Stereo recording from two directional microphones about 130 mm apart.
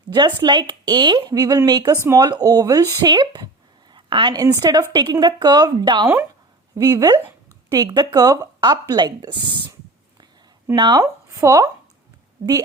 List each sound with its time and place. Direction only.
0.1 s a woman's voice: 35° right (ahead or behind)
3.9 s a sound: 35° right (ahead or behind)
4.6 s a woman's voice: 30° right (ahead or behind)
10.8 s speech: 35° right (ahead or behind)
11.0 s speech: 25° right (ahead or behind)